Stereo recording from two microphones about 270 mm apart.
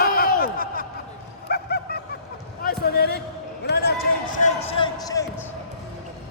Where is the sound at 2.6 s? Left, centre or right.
Left.